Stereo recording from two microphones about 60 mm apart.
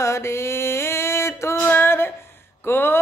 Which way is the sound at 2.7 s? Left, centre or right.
Left.